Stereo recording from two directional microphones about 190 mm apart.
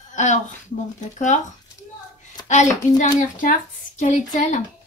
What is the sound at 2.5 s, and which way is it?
Speech, 40° left (ahead or behind).